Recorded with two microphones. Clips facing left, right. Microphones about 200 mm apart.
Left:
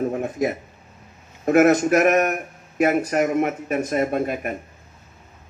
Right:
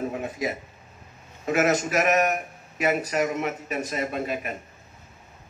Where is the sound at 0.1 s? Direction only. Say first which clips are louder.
Left 6 dB; 50° left (ahead or behind).